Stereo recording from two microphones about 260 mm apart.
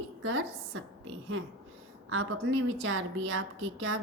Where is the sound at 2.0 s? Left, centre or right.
Right.